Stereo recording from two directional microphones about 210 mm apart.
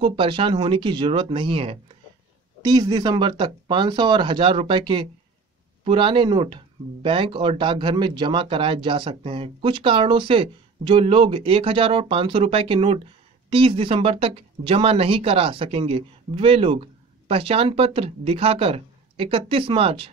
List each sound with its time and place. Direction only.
0.0 s speech: 25° right (ahead or behind)